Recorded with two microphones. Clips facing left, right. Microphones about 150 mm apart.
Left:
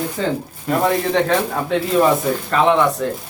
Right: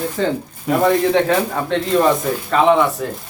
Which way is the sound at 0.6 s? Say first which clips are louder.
Right 3 dB; centre (ahead or behind).